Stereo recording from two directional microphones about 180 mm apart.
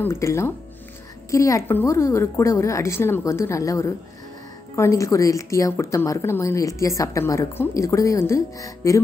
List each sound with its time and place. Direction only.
0.0 s speech: 15° left (ahead or behind)